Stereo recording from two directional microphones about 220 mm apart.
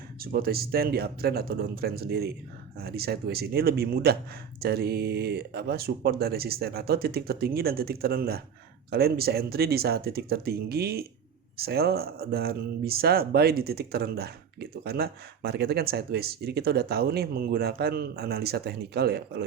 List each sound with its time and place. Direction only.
0.2 s speech: 40° right (ahead or behind)